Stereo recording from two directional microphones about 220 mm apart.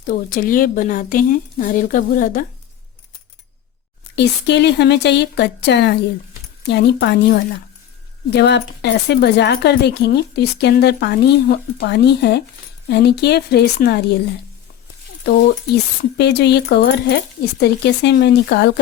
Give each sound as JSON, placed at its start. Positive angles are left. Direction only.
{"t": 0.1, "sound": "speech", "side_deg": 40}
{"t": 4.1, "sound": "speech", "side_deg": 50}
{"t": 15.2, "sound": "speech", "side_deg": 45}